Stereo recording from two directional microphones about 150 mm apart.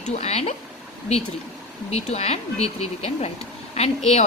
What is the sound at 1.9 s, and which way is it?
Speech, 45° left (ahead or behind).